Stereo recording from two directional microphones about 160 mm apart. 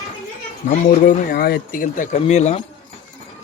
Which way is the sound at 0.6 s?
60° left (ahead or behind).